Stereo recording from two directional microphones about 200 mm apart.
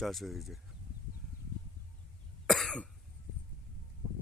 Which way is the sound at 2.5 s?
Centre (ahead or behind).